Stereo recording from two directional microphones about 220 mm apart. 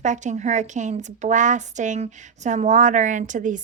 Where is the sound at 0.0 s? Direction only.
35° right (ahead or behind).